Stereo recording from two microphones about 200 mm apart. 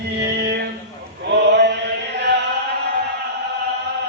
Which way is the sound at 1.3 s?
60° right (ahead or behind).